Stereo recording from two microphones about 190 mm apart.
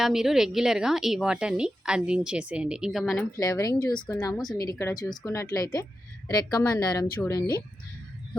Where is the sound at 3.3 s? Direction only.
20° left (ahead or behind).